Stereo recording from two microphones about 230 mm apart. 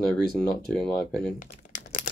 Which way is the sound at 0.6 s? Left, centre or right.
Centre.